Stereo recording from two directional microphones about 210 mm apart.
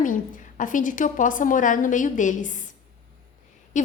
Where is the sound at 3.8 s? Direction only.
35° left (ahead or behind).